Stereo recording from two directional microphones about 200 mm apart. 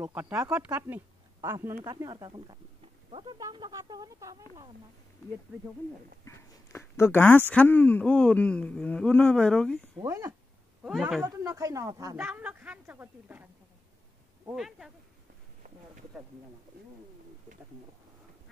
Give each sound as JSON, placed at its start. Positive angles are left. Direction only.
{"t": 0.0, "sound": "speech", "side_deg": -10}
{"t": 6.2, "sound": "speech", "side_deg": 15}
{"t": 10.0, "sound": "speech", "side_deg": -15}
{"t": 10.8, "sound": "a woman's voice", "side_deg": 0}
{"t": 11.2, "sound": "speech", "side_deg": -15}
{"t": 14.5, "sound": "a woman's voice", "side_deg": 0}